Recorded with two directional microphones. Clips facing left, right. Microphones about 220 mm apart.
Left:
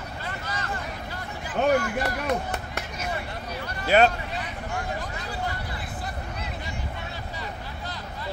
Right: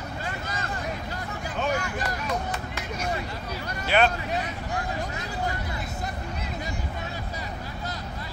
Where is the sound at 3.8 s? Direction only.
40° left (ahead or behind).